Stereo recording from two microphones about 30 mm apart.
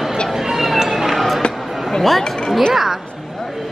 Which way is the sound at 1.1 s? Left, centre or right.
Centre.